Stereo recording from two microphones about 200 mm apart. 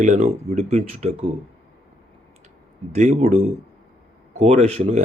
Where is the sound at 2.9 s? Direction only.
35° right (ahead or behind).